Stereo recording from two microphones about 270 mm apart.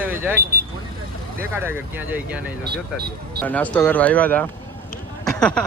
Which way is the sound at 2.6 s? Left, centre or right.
Right.